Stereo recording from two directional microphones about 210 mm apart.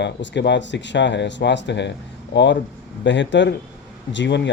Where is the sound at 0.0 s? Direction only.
55° left (ahead or behind).